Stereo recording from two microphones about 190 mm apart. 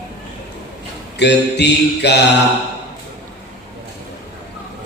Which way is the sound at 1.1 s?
65° left (ahead or behind).